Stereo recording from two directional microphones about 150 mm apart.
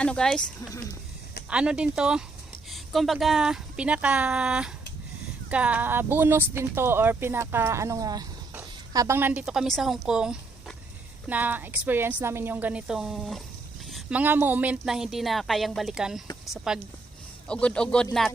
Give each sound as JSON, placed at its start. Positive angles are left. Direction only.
{"t": 0.0, "sound": "a woman's voice", "side_deg": 5}
{"t": 1.5, "sound": "a woman's voice", "side_deg": -5}
{"t": 16.2, "sound": "speech", "side_deg": 25}
{"t": 17.5, "sound": "a woman's voice", "side_deg": 5}